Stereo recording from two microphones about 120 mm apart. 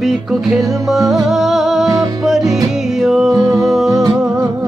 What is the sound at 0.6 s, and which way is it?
Music, 30° right (ahead or behind).